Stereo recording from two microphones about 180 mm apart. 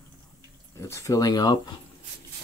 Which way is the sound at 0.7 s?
15° left (ahead or behind).